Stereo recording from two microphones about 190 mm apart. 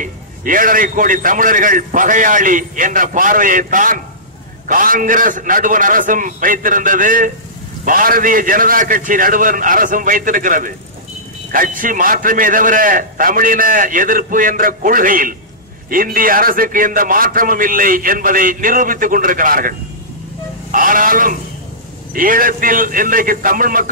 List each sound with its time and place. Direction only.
0.0 s a man's voice: 45° right (ahead or behind)
20.7 s a man's voice: 45° right (ahead or behind)